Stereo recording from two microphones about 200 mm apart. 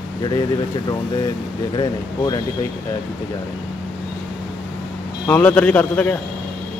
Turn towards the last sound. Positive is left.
turn(degrees=10)  # may be behind; listen again after turning